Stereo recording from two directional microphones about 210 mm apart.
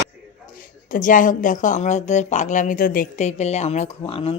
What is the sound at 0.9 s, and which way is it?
Speech, 40° left (ahead or behind).